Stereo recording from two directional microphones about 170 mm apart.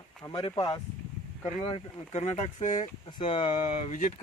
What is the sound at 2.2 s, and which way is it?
Speech, 45° left (ahead or behind).